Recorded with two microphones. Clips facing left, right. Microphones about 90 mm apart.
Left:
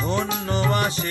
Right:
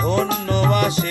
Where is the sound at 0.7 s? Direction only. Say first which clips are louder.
Right 4 dB; 35° left (ahead or behind).